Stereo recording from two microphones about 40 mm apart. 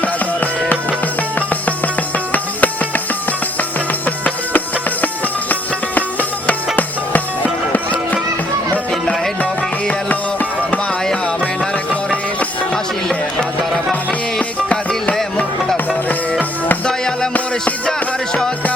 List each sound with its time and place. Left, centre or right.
2.3 s music: left
14.1 s music: left